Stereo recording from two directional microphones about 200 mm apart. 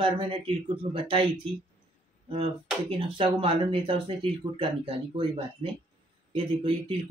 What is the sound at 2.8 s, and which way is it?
Speech, 25° right (ahead or behind).